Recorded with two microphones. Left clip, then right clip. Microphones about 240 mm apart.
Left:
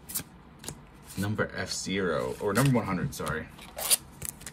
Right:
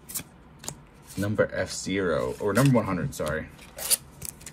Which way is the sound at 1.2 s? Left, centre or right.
Centre.